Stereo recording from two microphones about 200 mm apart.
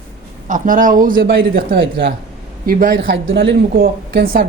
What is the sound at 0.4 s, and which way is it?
A man's voice, 40° right (ahead or behind).